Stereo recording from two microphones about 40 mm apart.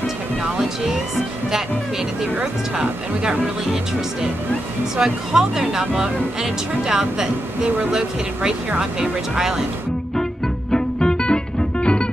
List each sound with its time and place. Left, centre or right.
4.9 s speech: centre
10.7 s music: centre